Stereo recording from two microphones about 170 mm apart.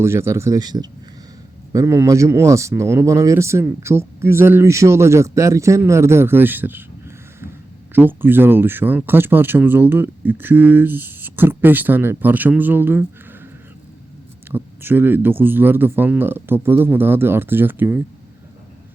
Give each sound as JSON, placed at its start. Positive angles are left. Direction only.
{"t": 0.0, "sound": "speech", "side_deg": -15}
{"t": 7.9, "sound": "speech", "side_deg": -10}
{"t": 14.5, "sound": "speech", "side_deg": -10}